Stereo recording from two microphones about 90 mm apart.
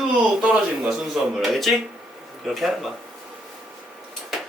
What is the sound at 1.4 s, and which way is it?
Speech, centre (ahead or behind).